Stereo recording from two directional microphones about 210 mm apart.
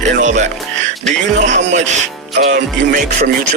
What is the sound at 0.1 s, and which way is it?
Music, 35° right (ahead or behind).